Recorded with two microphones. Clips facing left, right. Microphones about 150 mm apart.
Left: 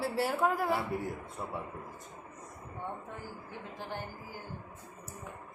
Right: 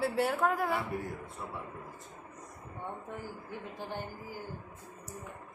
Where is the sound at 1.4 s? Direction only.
25° left (ahead or behind).